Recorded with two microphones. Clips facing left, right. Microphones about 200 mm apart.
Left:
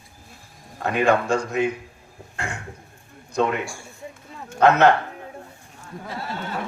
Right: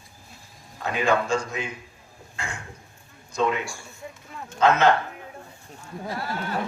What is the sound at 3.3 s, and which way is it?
Speech, 55° left (ahead or behind).